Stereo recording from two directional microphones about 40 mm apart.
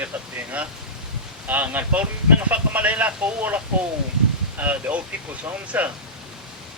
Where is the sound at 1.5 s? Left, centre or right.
Right.